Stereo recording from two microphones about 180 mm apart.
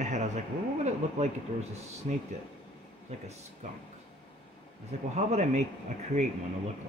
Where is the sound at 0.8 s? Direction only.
40° right (ahead or behind).